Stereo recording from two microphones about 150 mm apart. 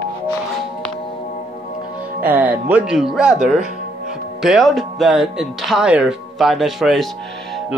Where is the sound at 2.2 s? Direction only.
10° right (ahead or behind).